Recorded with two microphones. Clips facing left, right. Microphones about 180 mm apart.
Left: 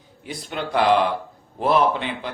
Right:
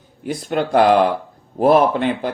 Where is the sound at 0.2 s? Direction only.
45° right (ahead or behind).